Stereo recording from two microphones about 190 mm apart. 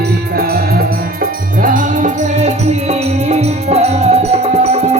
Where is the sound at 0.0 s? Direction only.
55° right (ahead or behind).